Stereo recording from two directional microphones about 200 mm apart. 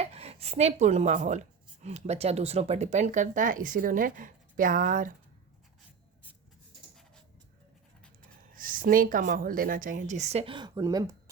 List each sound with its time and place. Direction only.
0.0 s speech: 30° right (ahead or behind)
8.5 s speech: 45° right (ahead or behind); by 11.1 s 15° right (ahead or behind)